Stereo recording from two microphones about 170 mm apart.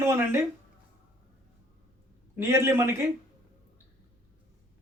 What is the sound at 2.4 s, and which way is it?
Speech, 15° right (ahead or behind).